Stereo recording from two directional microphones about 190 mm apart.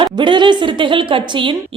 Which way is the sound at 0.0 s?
25° right (ahead or behind).